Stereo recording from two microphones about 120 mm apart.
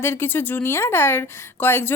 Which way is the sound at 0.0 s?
20° left (ahead or behind).